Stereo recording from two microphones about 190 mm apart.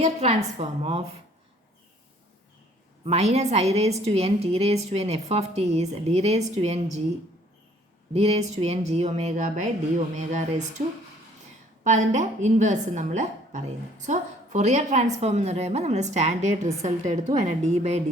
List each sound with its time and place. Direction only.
0.0 s a woman's voice: 35° right (ahead or behind)
3.0 s a woman's voice: 35° right (ahead or behind)
8.1 s a woman's voice: 35° right (ahead or behind)